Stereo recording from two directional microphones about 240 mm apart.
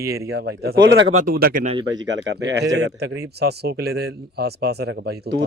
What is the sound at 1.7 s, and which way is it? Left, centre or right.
Speech, centre.